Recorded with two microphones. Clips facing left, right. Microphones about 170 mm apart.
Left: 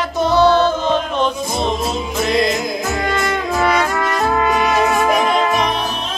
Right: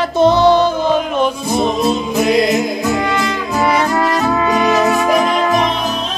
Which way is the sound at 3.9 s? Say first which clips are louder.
Right 3 dB; 40° right (ahead or behind).